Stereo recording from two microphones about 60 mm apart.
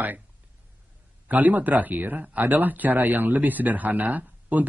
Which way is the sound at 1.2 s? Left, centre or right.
Right.